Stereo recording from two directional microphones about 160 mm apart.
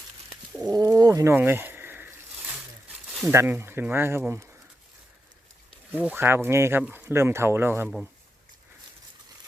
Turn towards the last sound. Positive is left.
turn(degrees=-15)  # may be behind; listen again after turning